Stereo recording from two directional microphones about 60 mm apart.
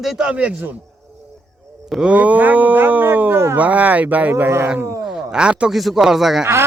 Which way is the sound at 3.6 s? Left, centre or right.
Right.